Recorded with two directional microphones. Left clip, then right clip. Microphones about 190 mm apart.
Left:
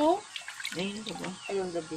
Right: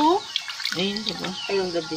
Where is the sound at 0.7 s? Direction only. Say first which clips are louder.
Right 10 dB; 25° left (ahead or behind).